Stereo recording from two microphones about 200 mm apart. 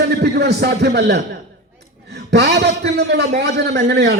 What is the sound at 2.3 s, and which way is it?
Speech, 55° right (ahead or behind).